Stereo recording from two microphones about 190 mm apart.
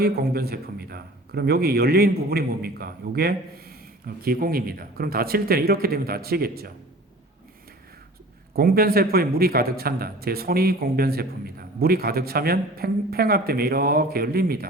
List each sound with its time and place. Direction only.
0.0 s a man's voice: 55° right (ahead or behind)
8.5 s a man's voice: 50° right (ahead or behind)